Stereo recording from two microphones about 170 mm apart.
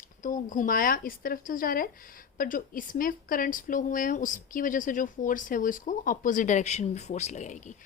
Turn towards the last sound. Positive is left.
turn(degrees=45)  # may be behind; listen again after turning